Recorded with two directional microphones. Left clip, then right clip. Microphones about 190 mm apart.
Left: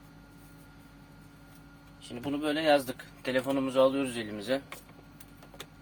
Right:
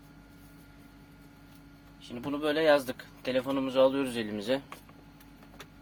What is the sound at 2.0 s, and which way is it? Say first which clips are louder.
Speech: right 1 dB; 30° right (ahead or behind).